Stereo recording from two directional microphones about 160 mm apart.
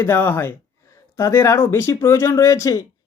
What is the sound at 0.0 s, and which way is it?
Speech, 15° left (ahead or behind).